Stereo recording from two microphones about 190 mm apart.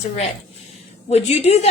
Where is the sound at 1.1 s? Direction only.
35° left (ahead or behind).